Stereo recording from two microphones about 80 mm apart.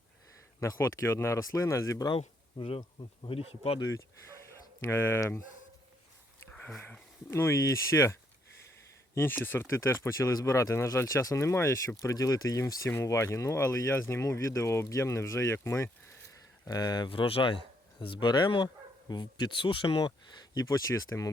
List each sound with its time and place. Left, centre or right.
0.6 s speech: left
3.0 s speech: left
4.8 s speech: left
6.5 s a sound: centre
7.3 s speech: left
9.1 s speech: left
16.6 s speech: left